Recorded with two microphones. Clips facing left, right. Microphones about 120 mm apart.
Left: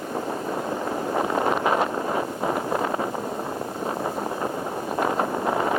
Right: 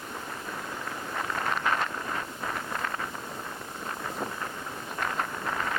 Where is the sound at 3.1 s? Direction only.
55° left (ahead or behind).